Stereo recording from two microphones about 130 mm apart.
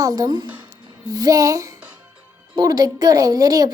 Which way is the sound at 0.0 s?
25° right (ahead or behind).